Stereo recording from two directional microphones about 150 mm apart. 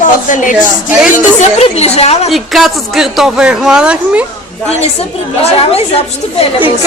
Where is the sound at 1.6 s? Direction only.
45° left (ahead or behind).